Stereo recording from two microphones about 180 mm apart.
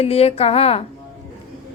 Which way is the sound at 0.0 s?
35° left (ahead or behind).